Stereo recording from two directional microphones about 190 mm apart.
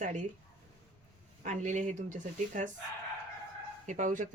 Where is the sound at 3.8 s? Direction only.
40° right (ahead or behind).